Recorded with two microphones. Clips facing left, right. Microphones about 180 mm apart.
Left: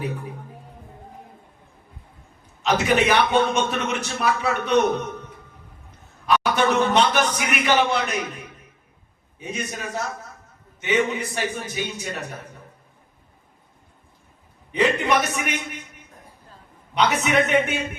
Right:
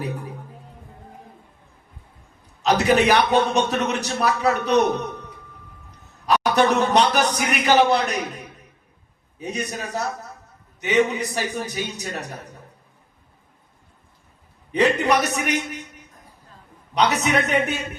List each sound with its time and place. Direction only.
2.6 s a man's voice: 40° right (ahead or behind)
14.7 s a man's voice: 40° right (ahead or behind)
16.9 s a man's voice: 35° right (ahead or behind)